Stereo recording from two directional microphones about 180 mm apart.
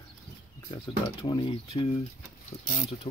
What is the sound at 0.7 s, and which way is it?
Speech, 25° left (ahead or behind).